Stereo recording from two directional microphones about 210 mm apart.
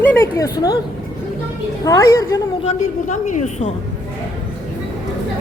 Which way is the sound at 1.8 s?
15° left (ahead or behind).